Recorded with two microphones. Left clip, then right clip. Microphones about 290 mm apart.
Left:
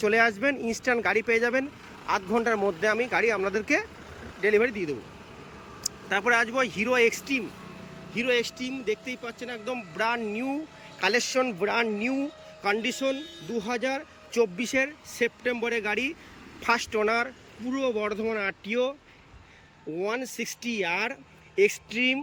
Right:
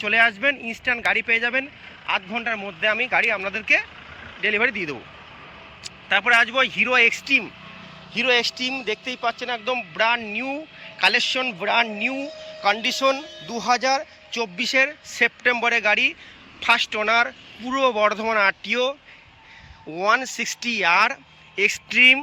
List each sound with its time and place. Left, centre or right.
0.0 s speech: centre
20.0 s speech: centre